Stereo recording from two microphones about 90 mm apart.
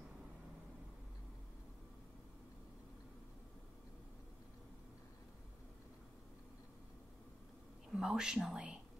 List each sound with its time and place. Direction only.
7.9 s speech: 5° right (ahead or behind)